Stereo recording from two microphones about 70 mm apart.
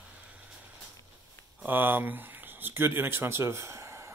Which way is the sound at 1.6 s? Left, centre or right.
Right.